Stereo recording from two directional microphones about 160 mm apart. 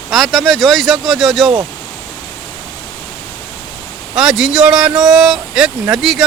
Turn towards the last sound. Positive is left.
turn(degrees=-5)  # may be behind; listen again after turning